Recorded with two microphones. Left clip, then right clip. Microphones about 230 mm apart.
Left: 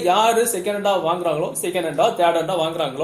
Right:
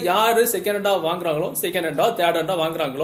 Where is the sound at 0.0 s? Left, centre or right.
Right.